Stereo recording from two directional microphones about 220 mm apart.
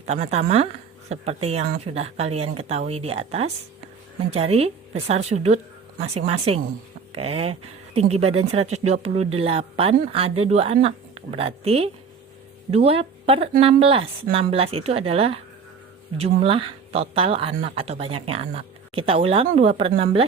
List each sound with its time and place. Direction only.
0.1 s speech: 30° right (ahead or behind)